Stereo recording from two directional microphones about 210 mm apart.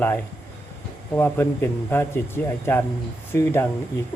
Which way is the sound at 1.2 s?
10° left (ahead or behind).